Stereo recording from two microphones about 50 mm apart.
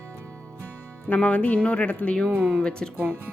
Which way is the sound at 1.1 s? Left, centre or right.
Left.